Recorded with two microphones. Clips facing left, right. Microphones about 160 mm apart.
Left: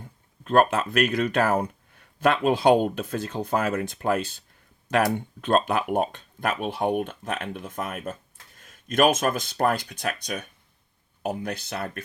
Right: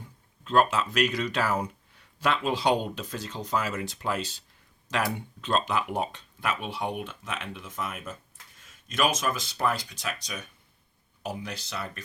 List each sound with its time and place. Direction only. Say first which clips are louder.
0.0 s speech: left 2 dB; 55° left (ahead or behind)